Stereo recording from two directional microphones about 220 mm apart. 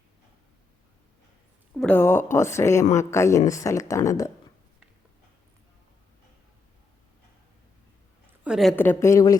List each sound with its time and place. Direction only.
1.7 s speech: 5° left (ahead or behind)
8.4 s a woman's voice: centre (ahead or behind)
8.7 s speech: 10° left (ahead or behind)